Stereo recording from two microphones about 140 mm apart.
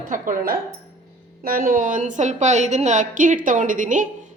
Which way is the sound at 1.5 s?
85° right.